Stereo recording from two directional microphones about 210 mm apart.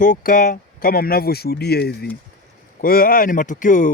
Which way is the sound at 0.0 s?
40° left (ahead or behind).